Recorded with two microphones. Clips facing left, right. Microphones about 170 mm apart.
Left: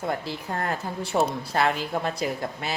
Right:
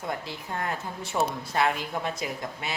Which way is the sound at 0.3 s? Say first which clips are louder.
Left 3 dB; 40° left (ahead or behind).